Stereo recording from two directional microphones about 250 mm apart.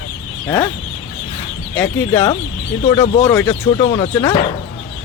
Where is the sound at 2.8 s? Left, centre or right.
Left.